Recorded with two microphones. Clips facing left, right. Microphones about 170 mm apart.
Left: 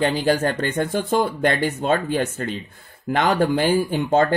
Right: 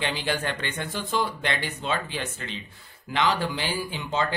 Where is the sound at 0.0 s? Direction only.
40° left (ahead or behind).